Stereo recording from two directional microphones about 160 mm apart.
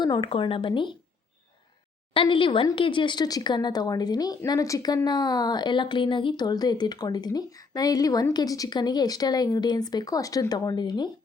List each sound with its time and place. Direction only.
0.0 s speech: 30° left (ahead or behind)
2.1 s a woman's voice: 30° left (ahead or behind)